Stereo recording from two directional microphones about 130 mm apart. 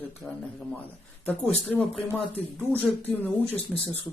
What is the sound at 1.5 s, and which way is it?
Speech, 10° left (ahead or behind).